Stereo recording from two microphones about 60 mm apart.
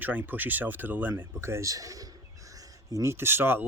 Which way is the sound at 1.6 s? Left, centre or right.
Right.